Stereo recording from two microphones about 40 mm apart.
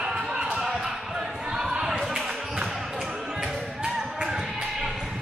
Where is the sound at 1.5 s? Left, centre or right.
Centre.